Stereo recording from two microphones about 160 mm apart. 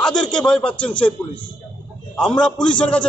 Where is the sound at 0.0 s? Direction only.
5° left (ahead or behind).